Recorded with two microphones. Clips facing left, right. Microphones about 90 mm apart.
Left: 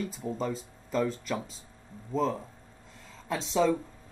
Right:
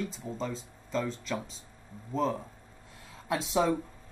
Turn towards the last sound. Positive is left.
turn(degrees=-10)  # may be behind; listen again after turning